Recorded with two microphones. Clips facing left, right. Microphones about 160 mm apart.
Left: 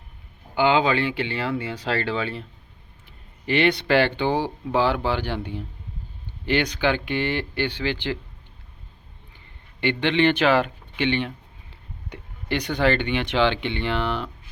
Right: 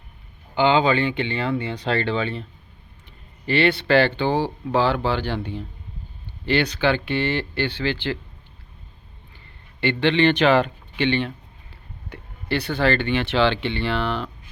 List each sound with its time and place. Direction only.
0.5 s speech: 10° left (ahead or behind)
3.4 s speech: 15° left (ahead or behind)
9.8 s speech: 15° left (ahead or behind)